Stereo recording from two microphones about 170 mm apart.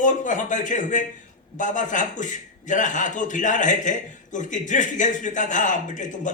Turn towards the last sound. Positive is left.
turn(degrees=45)  # may be behind; listen again after turning